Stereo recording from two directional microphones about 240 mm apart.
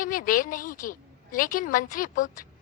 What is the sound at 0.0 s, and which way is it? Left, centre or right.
A woman's voice, left.